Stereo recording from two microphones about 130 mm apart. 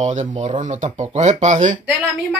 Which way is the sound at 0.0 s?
70° right (ahead or behind).